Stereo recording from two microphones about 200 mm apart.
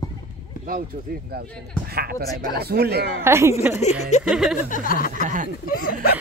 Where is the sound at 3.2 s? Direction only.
15° right (ahead or behind).